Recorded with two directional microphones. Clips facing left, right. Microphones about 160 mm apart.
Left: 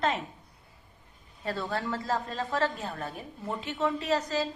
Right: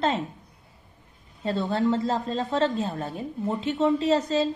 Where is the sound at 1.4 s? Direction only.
25° right (ahead or behind).